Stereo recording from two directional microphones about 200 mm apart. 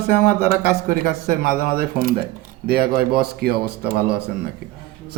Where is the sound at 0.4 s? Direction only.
50° right (ahead or behind).